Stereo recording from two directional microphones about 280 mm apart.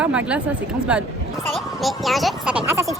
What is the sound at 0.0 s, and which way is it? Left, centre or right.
A woman's voice, centre.